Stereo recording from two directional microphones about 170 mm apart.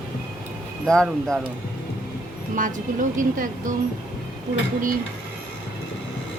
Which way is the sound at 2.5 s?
50° right (ahead or behind).